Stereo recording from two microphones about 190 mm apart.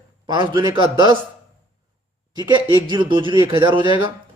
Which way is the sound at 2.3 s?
20° right (ahead or behind).